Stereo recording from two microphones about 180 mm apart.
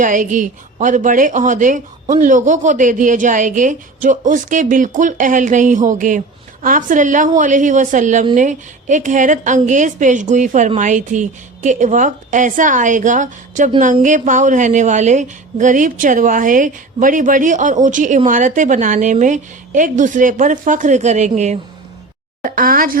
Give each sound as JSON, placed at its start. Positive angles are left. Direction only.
{"t": 0.0, "sound": "a woman's voice", "side_deg": -45}
{"t": 22.4, "sound": "a woman's voice", "side_deg": -50}